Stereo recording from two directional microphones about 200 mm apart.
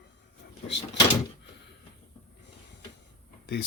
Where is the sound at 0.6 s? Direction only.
60° left (ahead or behind).